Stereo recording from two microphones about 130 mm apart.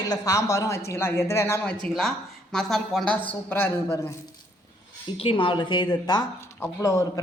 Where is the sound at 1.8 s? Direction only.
5° left (ahead or behind); by 4.1 s 20° left (ahead or behind).